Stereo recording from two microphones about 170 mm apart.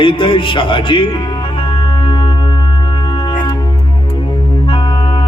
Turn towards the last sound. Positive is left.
turn(degrees=30)  # may be behind; listen again after turning